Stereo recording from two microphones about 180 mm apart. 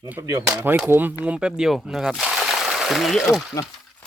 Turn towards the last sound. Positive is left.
turn(degrees=0)  # may be behind; listen again after turning